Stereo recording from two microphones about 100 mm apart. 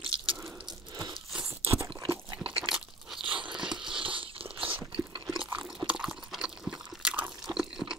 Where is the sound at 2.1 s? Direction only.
15° right (ahead or behind).